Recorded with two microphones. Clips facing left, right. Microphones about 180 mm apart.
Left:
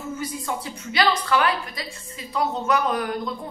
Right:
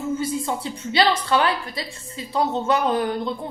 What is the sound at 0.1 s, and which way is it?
A woman's voice, 25° right (ahead or behind).